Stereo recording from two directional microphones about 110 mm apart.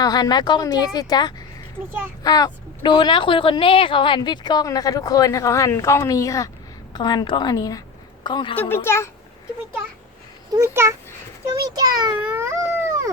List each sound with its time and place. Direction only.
0.0 s a woman's voice: 40° left (ahead or behind)
6.9 s a woman's voice: 40° left (ahead or behind)
8.7 s a child's voice: 20° left (ahead or behind)
10.5 s a child's voice: 25° right (ahead or behind)
11.5 s a child's voice: 40° right (ahead or behind)
12.2 s baby cry: 20° right (ahead or behind)